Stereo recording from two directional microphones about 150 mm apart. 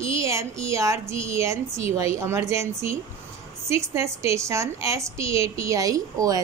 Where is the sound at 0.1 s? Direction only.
20° right (ahead or behind).